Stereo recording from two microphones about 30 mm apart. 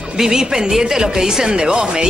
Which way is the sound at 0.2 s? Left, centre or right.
Right.